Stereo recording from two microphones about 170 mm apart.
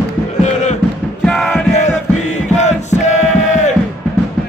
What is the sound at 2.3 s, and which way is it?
Music, 40° left (ahead or behind).